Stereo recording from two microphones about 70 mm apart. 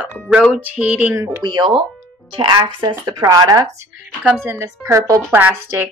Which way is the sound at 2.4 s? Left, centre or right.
Right.